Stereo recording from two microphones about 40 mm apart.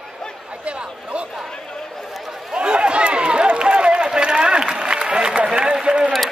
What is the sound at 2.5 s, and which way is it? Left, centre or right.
Run, right.